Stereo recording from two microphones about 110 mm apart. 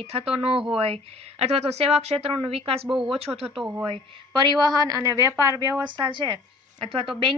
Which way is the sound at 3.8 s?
45° right (ahead or behind).